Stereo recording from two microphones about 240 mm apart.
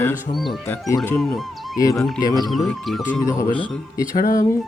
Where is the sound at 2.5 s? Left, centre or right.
Centre.